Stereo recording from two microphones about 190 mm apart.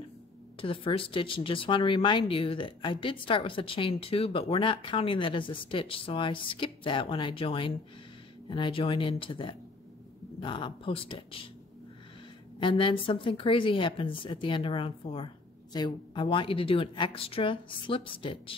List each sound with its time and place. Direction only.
0.6 s speech: 30° left (ahead or behind)
12.5 s speech: 25° left (ahead or behind)